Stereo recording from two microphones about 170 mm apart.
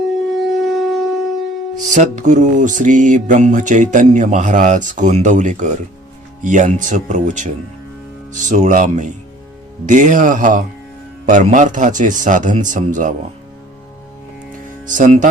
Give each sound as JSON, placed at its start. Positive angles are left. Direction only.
{"t": 0.6, "sound": "shofar", "side_deg": 0}
{"t": 1.9, "sound": "speech", "side_deg": -45}
{"t": 14.8, "sound": "speech", "side_deg": -45}